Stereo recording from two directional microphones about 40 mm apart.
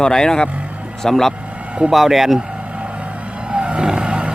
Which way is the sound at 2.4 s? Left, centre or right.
Right.